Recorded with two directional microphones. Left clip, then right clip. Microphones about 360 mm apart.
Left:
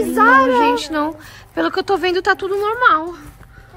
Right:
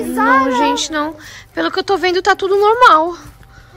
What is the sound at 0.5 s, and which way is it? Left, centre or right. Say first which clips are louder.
A woman's voice: even; centre.